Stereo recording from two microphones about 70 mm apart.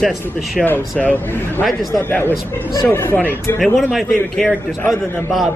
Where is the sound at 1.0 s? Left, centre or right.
Left.